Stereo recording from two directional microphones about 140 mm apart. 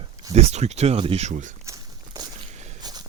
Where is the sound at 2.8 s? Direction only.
30° right (ahead or behind).